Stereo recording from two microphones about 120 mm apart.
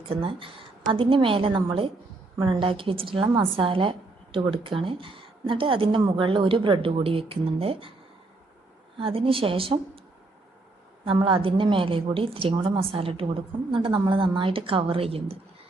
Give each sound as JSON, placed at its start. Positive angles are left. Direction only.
{"t": 0.1, "sound": "a woman's voice", "side_deg": -50}
{"t": 9.0, "sound": "a woman's voice", "side_deg": -50}
{"t": 11.0, "sound": "a woman's voice", "side_deg": -45}